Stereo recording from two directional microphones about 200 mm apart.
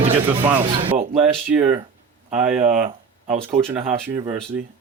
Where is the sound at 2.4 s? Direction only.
5° right (ahead or behind).